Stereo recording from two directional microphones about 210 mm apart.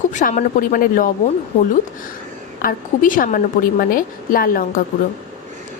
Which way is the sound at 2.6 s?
40° left (ahead or behind).